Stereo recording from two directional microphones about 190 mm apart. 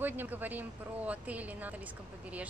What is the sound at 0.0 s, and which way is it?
Speech, 10° right (ahead or behind).